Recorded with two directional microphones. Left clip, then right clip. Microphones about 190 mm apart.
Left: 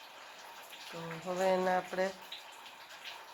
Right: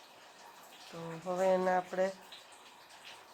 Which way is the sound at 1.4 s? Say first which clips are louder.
Right 1 dB; 20° left (ahead or behind).